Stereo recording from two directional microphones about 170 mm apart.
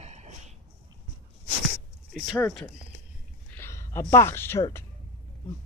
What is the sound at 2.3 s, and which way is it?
Speech, 10° left (ahead or behind).